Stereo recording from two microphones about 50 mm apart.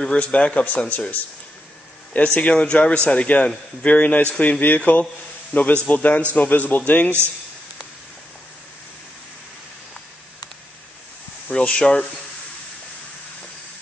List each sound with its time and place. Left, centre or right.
0.2 s a man's voice: left
11.4 s speech: left